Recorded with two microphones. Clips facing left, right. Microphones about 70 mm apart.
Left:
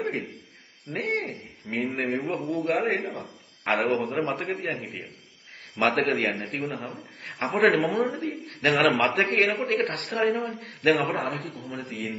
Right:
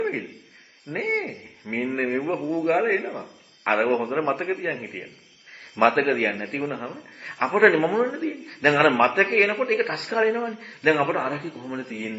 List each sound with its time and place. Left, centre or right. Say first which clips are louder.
0.0 s a sound: right 3 dB; centre
0.9 s speech: right 2 dB; right
1.2 s a man's voice: right 2 dB; centre
9.7 s speech: right 2 dB; right
10.1 s a man's voice: right 4 dB; centre